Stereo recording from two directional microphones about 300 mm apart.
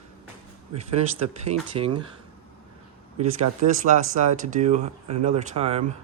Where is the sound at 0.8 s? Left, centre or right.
Right.